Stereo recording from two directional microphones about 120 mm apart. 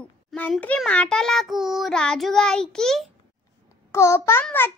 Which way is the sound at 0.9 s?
10° left (ahead or behind).